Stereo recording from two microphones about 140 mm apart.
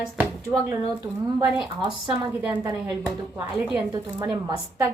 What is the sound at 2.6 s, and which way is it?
Speech, 30° right (ahead or behind).